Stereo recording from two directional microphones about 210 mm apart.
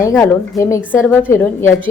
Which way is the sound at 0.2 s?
15° left (ahead or behind).